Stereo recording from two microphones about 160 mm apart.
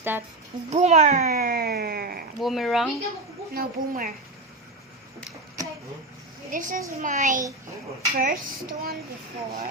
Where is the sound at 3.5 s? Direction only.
65° right (ahead or behind).